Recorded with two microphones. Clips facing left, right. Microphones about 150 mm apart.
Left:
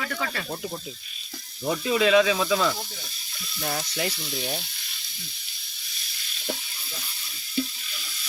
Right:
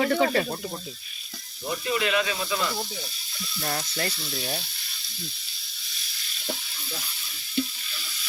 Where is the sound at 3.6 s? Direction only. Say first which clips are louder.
Left 1 dB; centre (ahead or behind).